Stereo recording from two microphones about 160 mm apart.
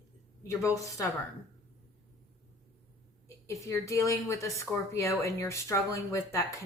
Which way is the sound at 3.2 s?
20° left (ahead or behind).